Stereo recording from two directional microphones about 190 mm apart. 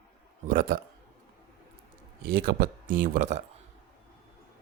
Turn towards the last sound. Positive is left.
turn(degrees=-40)  # may be behind; listen again after turning